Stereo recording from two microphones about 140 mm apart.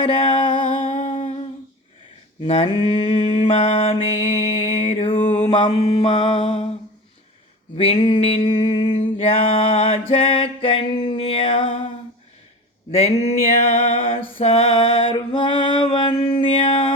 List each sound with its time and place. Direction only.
0.0 s music: 40° left (ahead or behind)
2.4 s mantra: 40° left (ahead or behind)
5.1 s mantra: 65° left (ahead or behind)
5.4 s mantra: 35° left (ahead or behind)
7.8 s mantra: 45° left (ahead or behind)
12.9 s mantra: 50° left (ahead or behind)
15.0 s a sound: 35° left (ahead or behind)